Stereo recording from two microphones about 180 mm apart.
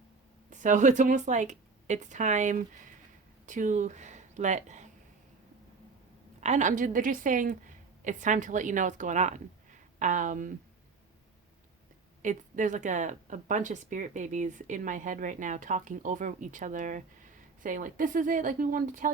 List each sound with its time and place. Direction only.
0.5 s speech: 40° right (ahead or behind)
6.4 s speech: 40° right (ahead or behind)
12.2 s speech: 45° right (ahead or behind)